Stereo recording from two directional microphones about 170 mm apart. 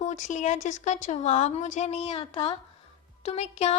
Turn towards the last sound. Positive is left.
turn(degrees=40)  # may be behind; listen again after turning